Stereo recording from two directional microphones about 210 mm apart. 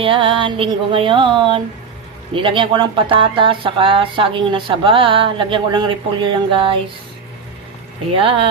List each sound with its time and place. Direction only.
0.0 s speech: 25° right (ahead or behind)
8.1 s speech: 25° right (ahead or behind)